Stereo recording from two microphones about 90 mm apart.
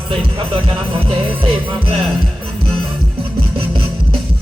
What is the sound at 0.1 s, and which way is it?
Speech, 85° right.